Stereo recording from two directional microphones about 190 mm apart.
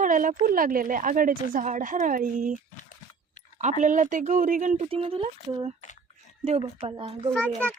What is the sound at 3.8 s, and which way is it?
Speech, 40° right (ahead or behind).